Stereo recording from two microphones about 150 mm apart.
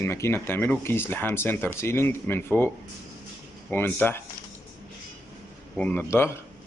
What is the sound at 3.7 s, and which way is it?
Speech, 15° left (ahead or behind).